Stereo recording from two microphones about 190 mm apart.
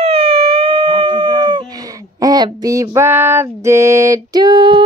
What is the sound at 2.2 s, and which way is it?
Female singing, 20° right (ahead or behind).